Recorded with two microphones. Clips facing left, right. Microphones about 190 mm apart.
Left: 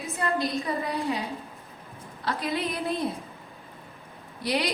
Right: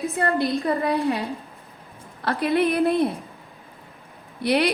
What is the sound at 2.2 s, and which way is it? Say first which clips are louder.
Speech: right 8 dB; 60° right (ahead or behind).